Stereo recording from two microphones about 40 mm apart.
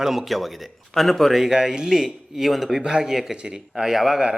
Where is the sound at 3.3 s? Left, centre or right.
Right.